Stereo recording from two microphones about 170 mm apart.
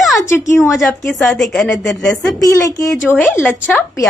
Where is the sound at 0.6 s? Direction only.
Centre (ahead or behind).